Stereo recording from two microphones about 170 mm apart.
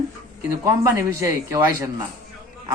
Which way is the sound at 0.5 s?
20° right (ahead or behind).